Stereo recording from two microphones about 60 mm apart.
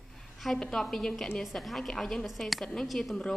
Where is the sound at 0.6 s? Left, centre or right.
Centre.